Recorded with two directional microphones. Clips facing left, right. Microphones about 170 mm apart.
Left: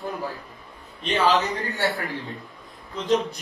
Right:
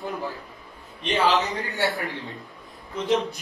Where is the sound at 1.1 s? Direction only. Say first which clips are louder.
Left 1 dB; 20° right (ahead or behind).